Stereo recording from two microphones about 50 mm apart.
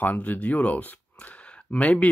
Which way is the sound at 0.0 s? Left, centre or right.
Left.